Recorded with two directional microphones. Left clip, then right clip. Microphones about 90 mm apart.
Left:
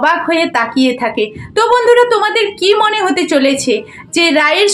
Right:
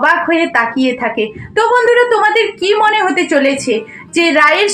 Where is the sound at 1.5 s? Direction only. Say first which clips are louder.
Left 1 dB; 10° left (ahead or behind).